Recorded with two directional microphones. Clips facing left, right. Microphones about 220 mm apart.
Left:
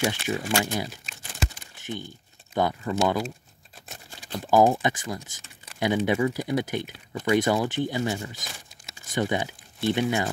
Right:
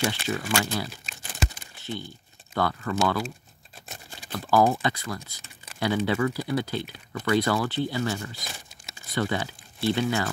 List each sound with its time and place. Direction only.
0.0 s speech: 20° left (ahead or behind)
4.3 s speech: 20° left (ahead or behind)